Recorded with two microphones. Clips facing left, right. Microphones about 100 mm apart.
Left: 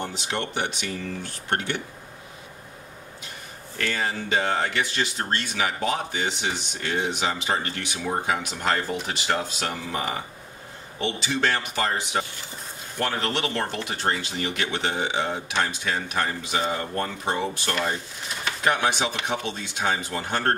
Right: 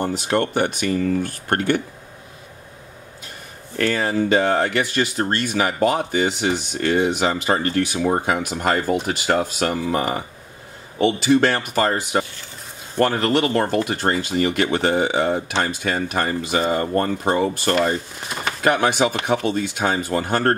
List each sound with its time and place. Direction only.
0.0 s speech: 45° right (ahead or behind)
3.7 s speech: 45° right (ahead or behind)